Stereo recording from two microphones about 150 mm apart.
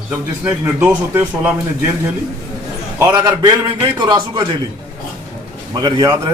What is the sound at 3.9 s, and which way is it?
Speech, 30° right (ahead or behind).